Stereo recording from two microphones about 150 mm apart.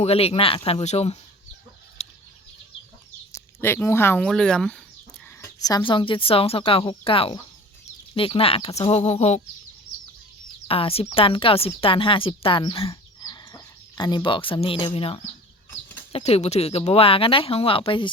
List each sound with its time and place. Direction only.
0.0 s speech: 40° left (ahead or behind)
3.3 s speech: 15° left (ahead or behind)
5.4 s speech: 25° left (ahead or behind); by 9.4 s 45° left (ahead or behind)
10.7 s speech: 40° left (ahead or behind)